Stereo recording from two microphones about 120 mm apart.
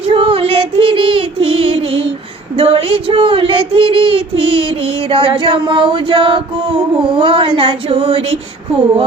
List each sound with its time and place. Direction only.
0.0 s female singing: 50° right (ahead or behind)
2.6 s child singing: 55° right (ahead or behind)